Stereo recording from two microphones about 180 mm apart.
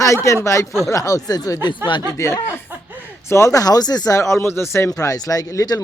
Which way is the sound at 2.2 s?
15° left (ahead or behind).